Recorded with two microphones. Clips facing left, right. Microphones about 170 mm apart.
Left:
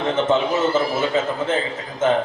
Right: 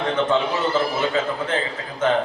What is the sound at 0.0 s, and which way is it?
Speech, 25° left (ahead or behind).